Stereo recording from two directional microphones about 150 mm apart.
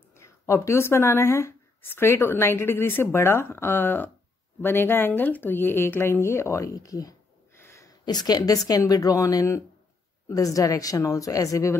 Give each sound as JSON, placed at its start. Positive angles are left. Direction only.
{"t": 0.1, "sound": "speech", "side_deg": 15}